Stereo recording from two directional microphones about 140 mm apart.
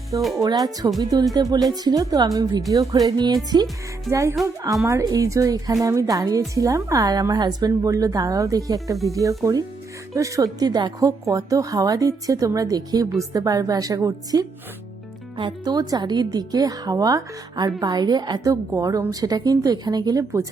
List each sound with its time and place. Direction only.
0.3 s a woman's voice: 25° right (ahead or behind)
3.1 s music: 30° right (ahead or behind)
4.1 s a woman's voice: 20° right (ahead or behind)